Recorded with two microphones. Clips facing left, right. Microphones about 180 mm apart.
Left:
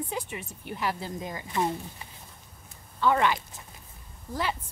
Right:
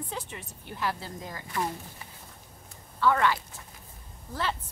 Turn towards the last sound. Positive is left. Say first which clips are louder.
# left 1 dB
turn(degrees=10)  # may be behind; listen again after turning